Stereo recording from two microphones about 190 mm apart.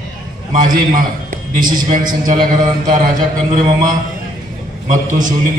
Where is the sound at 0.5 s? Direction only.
45° right (ahead or behind).